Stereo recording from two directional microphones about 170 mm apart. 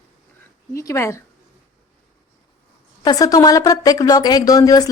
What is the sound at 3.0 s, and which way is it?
Speech, 20° left (ahead or behind).